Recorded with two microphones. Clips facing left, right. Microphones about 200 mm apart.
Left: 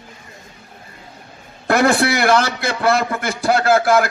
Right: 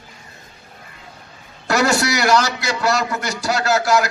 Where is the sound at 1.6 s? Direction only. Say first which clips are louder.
Left 3 dB; 55° left (ahead or behind).